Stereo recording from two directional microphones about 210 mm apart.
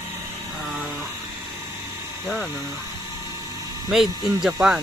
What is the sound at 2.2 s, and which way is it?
Speech, centre (ahead or behind).